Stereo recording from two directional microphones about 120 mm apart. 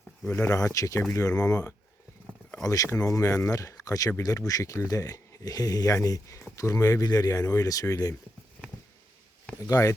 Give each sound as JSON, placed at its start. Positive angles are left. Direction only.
{"t": 0.3, "sound": "speech", "side_deg": 15}
{"t": 0.5, "sound": "speech", "side_deg": 30}
{"t": 9.6, "sound": "speech", "side_deg": 25}